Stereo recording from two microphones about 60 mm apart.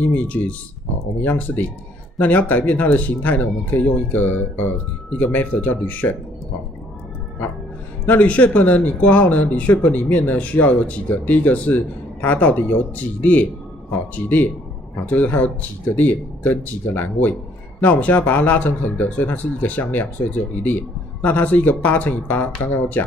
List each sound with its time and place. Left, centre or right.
0.1 s a man's voice: left
8.0 s a man's voice: left